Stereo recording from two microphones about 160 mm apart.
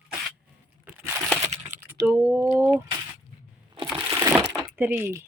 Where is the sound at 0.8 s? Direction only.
10° right (ahead or behind).